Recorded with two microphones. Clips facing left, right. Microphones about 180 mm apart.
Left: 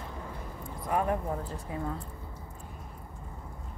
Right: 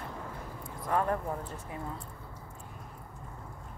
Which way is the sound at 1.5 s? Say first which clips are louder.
Left 4 dB; 35° left (ahead or behind).